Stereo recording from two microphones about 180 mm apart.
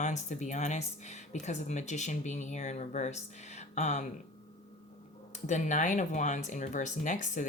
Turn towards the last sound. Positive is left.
turn(degrees=45)  # may be behind; listen again after turning